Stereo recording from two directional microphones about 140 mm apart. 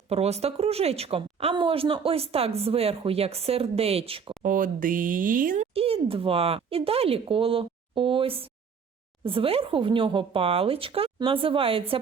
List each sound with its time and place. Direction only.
0.1 s a woman's voice: 50° right (ahead or behind)
4.4 s speech: 75° right (ahead or behind)
5.7 s speech: 45° right (ahead or behind)